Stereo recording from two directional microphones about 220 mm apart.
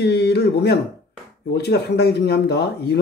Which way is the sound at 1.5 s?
50° left (ahead or behind).